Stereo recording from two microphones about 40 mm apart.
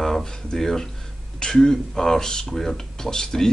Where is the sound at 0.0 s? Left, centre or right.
Centre.